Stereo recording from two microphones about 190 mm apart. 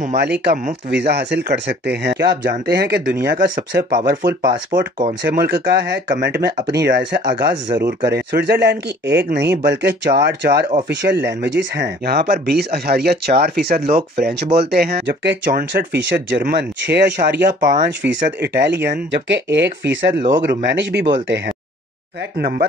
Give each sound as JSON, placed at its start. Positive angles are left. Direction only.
{"t": 0.1, "sound": "speech", "side_deg": -60}
{"t": 5.2, "sound": "speech", "side_deg": -60}
{"t": 15.4, "sound": "speech", "side_deg": -50}
{"t": 16.1, "sound": "speech", "side_deg": -70}
{"t": 20.2, "sound": "speech", "side_deg": -25}
{"t": 20.4, "sound": "speech", "side_deg": -65}
{"t": 22.4, "sound": "speech", "side_deg": -55}